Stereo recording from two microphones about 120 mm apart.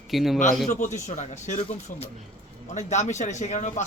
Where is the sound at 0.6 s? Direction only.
80° left.